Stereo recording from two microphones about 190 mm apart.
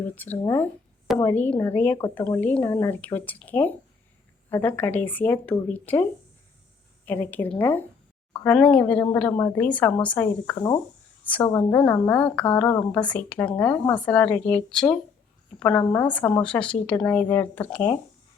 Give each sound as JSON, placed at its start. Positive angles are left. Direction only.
{"t": 0.2, "sound": "a woman's voice", "side_deg": 10}